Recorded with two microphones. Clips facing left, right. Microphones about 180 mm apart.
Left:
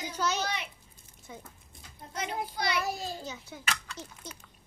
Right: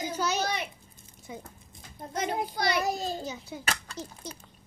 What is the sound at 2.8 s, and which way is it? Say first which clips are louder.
Speech: right 4 dB; 20° right (ahead or behind).